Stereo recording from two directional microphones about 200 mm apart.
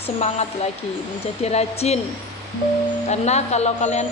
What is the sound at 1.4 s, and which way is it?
Speech, 30° left (ahead or behind).